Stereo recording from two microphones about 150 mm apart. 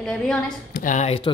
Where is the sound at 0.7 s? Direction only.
60° left (ahead or behind).